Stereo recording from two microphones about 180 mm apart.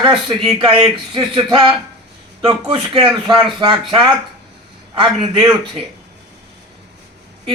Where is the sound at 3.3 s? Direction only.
25° right (ahead or behind).